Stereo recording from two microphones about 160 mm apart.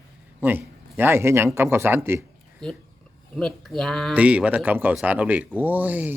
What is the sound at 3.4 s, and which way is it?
Speech, 5° left (ahead or behind).